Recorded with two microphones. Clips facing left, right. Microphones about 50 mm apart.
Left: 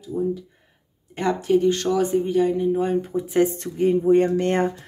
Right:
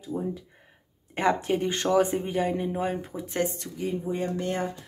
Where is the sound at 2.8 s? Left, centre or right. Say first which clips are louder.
Left 7 dB; centre.